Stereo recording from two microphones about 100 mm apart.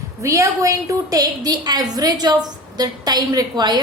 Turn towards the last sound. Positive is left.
turn(degrees=-45)  # may be behind; listen again after turning